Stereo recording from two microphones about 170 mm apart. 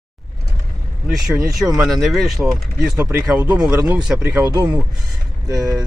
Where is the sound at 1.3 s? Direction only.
15° right (ahead or behind).